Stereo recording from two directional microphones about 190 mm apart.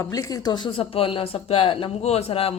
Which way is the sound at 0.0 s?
20° left (ahead or behind).